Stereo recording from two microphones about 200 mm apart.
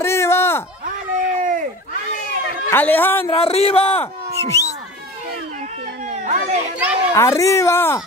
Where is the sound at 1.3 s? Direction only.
40° right (ahead or behind).